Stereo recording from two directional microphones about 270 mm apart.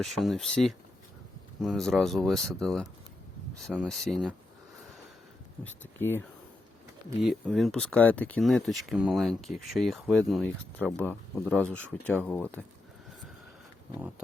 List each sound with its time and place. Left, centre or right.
0.0 s speech: centre
5.6 s speech: centre